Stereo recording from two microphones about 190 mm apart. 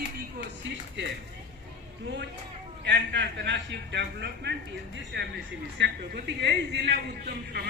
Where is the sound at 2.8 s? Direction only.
65° right (ahead or behind).